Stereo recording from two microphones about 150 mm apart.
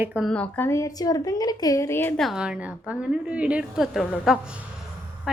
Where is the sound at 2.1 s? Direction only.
Centre (ahead or behind).